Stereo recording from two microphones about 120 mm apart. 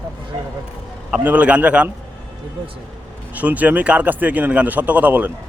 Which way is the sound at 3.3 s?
15° right (ahead or behind).